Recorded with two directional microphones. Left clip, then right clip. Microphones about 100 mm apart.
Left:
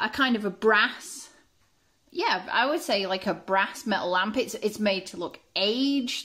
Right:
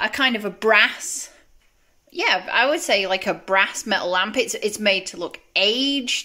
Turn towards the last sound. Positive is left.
turn(degrees=-10)  # may be behind; listen again after turning